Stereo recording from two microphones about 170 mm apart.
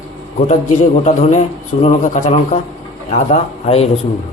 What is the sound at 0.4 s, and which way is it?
A man's voice, 40° left (ahead or behind).